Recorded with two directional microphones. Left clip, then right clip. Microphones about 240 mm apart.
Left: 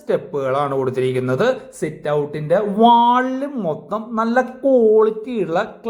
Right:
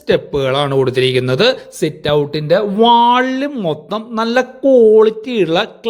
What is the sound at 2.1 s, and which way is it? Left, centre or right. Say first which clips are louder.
Speech: right 4 dB; right.